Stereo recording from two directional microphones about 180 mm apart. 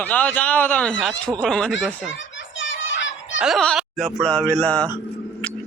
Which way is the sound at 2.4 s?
90° left.